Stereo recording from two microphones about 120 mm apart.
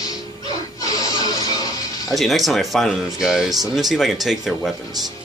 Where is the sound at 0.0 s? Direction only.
30° left (ahead or behind).